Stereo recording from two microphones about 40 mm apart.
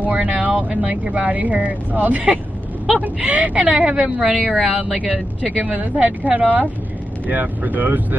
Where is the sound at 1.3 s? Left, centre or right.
Right.